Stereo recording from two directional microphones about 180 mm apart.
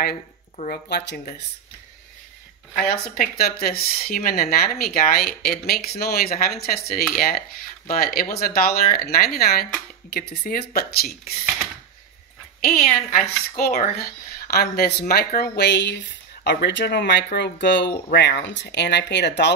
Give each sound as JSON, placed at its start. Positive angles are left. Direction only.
{"t": 0.8, "sound": "speech", "side_deg": 70}
{"t": 2.9, "sound": "a woman's voice", "side_deg": 60}
{"t": 12.6, "sound": "a woman's voice", "side_deg": 50}